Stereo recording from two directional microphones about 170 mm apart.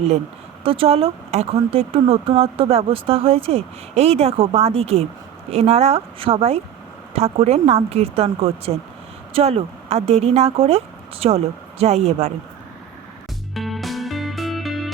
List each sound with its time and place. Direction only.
0.6 s speech: 35° right (ahead or behind)
13.5 s music: centre (ahead or behind)